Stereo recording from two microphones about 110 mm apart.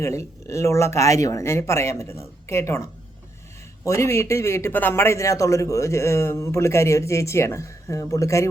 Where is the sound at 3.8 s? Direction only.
25° left (ahead or behind).